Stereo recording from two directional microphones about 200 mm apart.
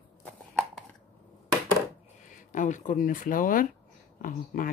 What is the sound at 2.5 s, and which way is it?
Speech, 40° left (ahead or behind).